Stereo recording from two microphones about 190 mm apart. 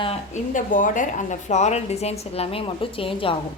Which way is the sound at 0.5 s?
45° left (ahead or behind).